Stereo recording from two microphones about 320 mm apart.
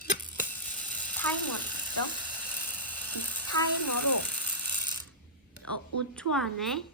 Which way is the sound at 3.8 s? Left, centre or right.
Left.